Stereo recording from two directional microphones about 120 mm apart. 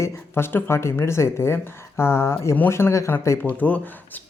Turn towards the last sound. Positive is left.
turn(degrees=20)  # may be behind; listen again after turning